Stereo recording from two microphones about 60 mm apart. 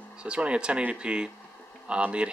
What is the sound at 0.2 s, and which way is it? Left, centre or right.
Speech, centre.